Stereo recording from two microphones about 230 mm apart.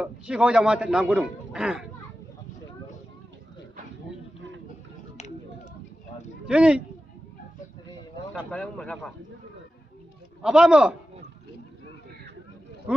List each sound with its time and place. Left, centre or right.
0.0 s a man's voice: centre
6.4 s speech: centre
8.5 s a man's voice: centre
10.4 s a man's voice: centre